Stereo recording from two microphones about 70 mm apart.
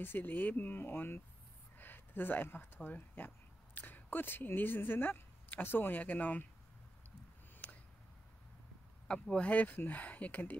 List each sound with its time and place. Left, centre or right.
0.0 s speech: left
7.6 s a sound: centre
9.0 s speech: centre